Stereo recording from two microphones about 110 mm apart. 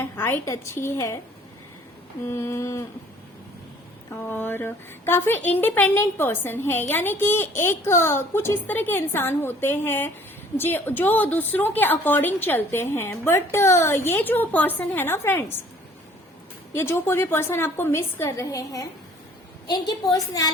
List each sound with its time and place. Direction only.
0.0 s speech: 20° left (ahead or behind)
2.2 s speech: 25° left (ahead or behind)
4.1 s speech: 20° left (ahead or behind)
16.7 s a woman's voice: 20° left (ahead or behind)